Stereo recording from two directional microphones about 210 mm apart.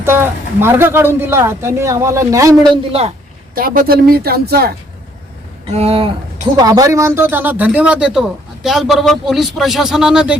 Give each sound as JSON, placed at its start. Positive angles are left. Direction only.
{"t": 0.0, "sound": "speech", "side_deg": -10}
{"t": 3.5, "sound": "speech", "side_deg": -45}
{"t": 5.7, "sound": "speech", "side_deg": -30}